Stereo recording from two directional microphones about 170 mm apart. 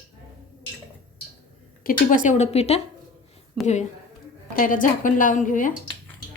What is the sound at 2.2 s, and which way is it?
Speech, 45° left (ahead or behind).